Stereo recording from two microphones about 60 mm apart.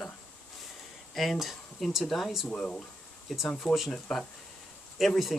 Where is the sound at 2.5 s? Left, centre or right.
Centre.